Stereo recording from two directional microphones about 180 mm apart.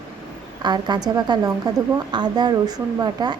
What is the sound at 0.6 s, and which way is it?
Speech, 25° right (ahead or behind).